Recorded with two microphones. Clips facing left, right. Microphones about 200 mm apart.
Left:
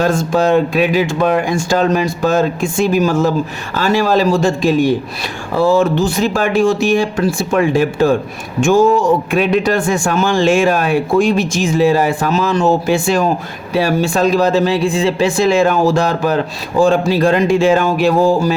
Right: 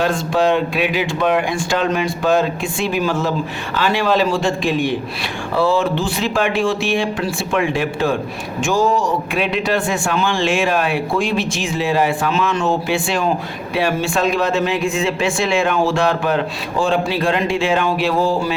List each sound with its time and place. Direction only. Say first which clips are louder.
0.0 s speech: left 3 dB; 45° left (ahead or behind)
9.3 s speech: left 5 dB; 45° left (ahead or behind)